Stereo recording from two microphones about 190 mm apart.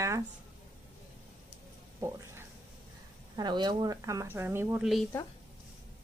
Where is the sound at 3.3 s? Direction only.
20° right (ahead or behind).